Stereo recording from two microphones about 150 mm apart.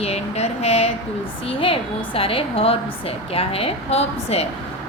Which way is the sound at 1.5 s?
35° left (ahead or behind).